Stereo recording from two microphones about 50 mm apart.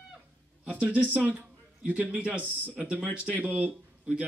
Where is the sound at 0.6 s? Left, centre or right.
Right.